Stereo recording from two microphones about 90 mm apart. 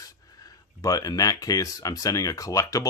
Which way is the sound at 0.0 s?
45° left (ahead or behind).